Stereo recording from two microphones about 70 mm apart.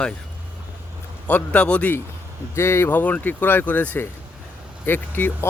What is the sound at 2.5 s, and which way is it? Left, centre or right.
Speech, left.